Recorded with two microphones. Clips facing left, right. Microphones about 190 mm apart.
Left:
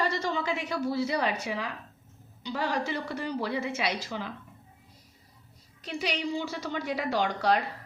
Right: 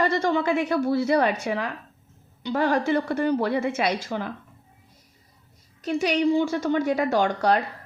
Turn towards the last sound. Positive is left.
turn(degrees=-45)  # may be behind; listen again after turning